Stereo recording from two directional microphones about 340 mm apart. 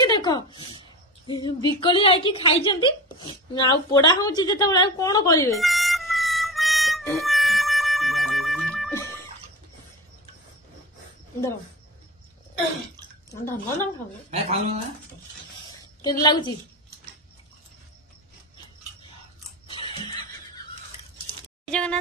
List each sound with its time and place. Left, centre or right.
0.0 s a woman's voice: centre
1.2 s a sound: centre
14.3 s speech: centre
15.8 s a woman's voice: centre
19.7 s neigh: centre
21.6 s a sound: centre